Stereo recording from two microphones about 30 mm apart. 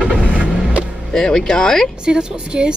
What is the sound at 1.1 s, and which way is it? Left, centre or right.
Speech, centre.